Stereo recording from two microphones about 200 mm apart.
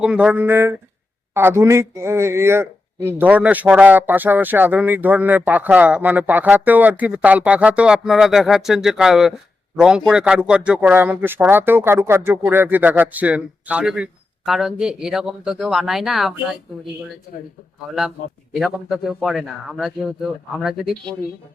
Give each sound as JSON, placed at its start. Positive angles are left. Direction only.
{"t": 0.0, "sound": "a man's voice", "side_deg": -5}
{"t": 17.3, "sound": "speech", "side_deg": 50}
{"t": 18.5, "sound": "a man's voice", "side_deg": 0}